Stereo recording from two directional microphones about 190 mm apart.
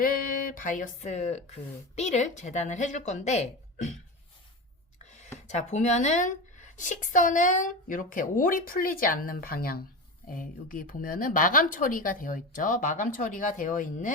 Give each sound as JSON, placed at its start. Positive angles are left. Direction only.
{"t": 0.0, "sound": "speech", "side_deg": 45}
{"t": 5.0, "sound": "a sound", "side_deg": 35}
{"t": 5.5, "sound": "a woman's voice", "side_deg": 35}